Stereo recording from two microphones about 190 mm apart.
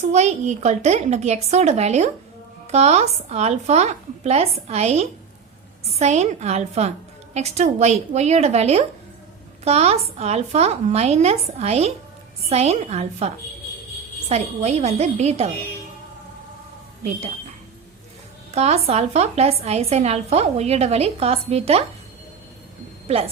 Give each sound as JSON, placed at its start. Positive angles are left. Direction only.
{"t": 0.1, "sound": "a woman's voice", "side_deg": -35}
{"t": 17.0, "sound": "a woman's voice", "side_deg": -35}
{"t": 18.5, "sound": "a woman's voice", "side_deg": -35}
{"t": 23.0, "sound": "a woman's voice", "side_deg": -30}